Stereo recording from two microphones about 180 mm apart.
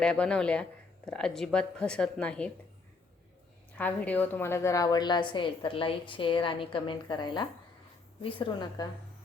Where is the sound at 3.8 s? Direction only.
10° left (ahead or behind); by 8.9 s 25° left (ahead or behind).